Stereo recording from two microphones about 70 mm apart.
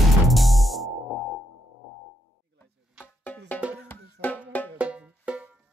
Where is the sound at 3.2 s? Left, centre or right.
Left.